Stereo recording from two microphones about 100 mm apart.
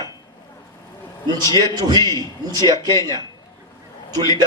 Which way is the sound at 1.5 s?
45° right (ahead or behind).